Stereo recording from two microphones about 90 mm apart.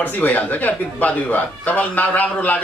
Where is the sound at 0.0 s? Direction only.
20° left (ahead or behind).